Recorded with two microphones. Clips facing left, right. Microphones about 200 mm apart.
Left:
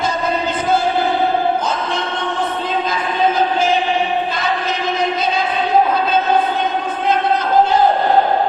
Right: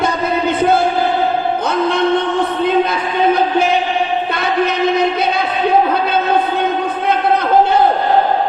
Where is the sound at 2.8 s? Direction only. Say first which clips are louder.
Right 3 dB; 60° right (ahead or behind).